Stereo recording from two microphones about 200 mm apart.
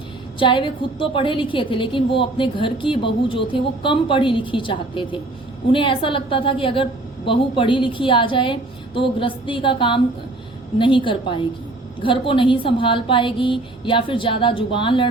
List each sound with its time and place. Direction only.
0.3 s a woman's voice: 25° left (ahead or behind)